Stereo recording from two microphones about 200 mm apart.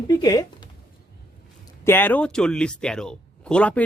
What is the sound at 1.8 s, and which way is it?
Speech, 10° left (ahead or behind).